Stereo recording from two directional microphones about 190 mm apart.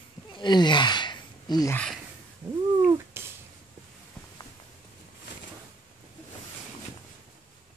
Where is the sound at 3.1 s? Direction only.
10° right (ahead or behind).